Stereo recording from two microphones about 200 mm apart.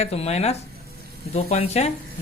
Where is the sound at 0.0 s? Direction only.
30° left (ahead or behind).